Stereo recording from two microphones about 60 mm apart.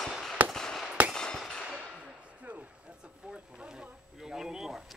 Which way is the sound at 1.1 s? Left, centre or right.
Centre.